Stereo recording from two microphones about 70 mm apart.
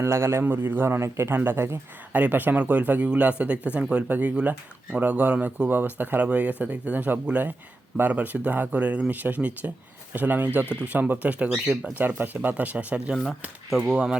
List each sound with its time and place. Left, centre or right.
0.0 s a man's voice: right
2.1 s speech: right
13.7 s speech: centre